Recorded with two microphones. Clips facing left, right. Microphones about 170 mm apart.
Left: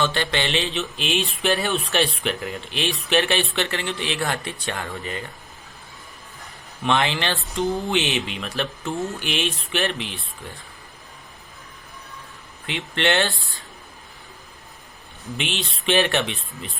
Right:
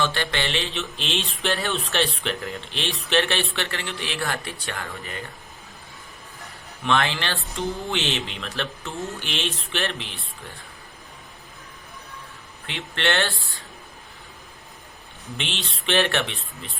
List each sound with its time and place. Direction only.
0.0 s speech: 20° left (ahead or behind)
6.8 s a man's voice: 20° left (ahead or behind)
12.6 s speech: 15° left (ahead or behind)
15.4 s speech: 15° left (ahead or behind)